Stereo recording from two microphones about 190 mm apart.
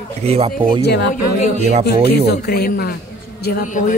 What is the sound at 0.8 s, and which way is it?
Speech, 60° left (ahead or behind).